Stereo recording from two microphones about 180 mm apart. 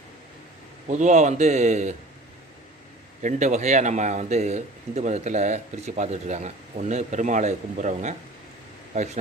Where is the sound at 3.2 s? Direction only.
40° right (ahead or behind).